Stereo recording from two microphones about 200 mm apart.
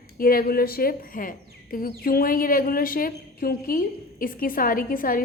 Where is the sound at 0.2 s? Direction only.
45° left (ahead or behind).